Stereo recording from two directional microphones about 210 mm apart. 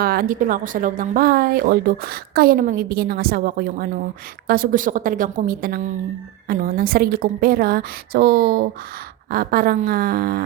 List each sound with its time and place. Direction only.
0.0 s a woman's voice: 45° right (ahead or behind)